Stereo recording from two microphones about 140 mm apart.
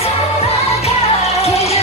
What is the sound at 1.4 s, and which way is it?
Music, 45° left (ahead or behind).